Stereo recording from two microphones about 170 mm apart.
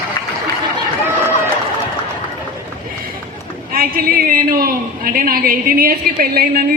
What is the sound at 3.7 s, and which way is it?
A woman's voice, 60° right (ahead or behind).